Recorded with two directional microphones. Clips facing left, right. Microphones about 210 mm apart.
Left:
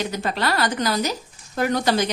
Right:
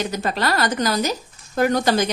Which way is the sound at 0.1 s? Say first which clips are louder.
Right 2 dB; 45° right (ahead or behind).